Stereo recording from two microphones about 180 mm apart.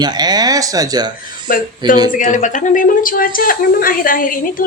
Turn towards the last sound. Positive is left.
turn(degrees=50)  # may be behind; listen again after turning